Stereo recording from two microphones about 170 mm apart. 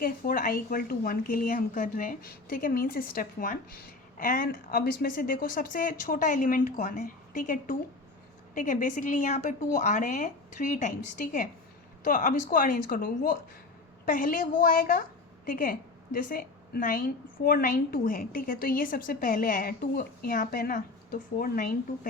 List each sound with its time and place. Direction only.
0.0 s a woman's voice: 55° left (ahead or behind)